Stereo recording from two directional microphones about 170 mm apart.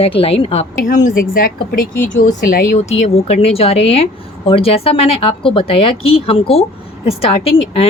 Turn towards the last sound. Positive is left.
turn(degrees=35)  # may be behind; listen again after turning